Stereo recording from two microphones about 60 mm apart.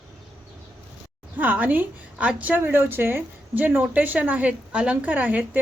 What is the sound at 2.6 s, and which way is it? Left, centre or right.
A woman's voice, right.